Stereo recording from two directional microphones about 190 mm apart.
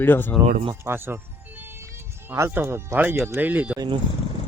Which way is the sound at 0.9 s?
10° right (ahead or behind).